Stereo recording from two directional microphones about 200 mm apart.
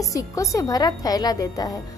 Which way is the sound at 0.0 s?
15° left (ahead or behind).